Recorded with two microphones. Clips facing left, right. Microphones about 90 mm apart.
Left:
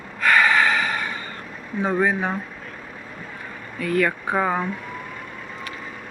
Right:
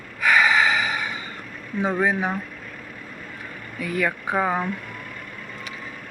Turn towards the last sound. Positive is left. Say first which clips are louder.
# left 1 dB
turn(degrees=0)  # may be behind; listen again after turning